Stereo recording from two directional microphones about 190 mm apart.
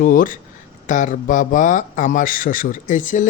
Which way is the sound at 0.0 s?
45° left (ahead or behind).